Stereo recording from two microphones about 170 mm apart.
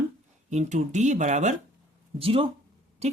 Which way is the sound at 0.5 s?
45° right (ahead or behind).